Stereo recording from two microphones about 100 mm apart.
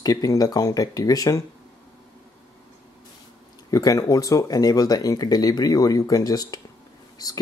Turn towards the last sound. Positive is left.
turn(degrees=40)  # may be behind; listen again after turning